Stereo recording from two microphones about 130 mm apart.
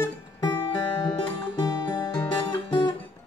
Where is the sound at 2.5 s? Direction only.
40° left (ahead or behind).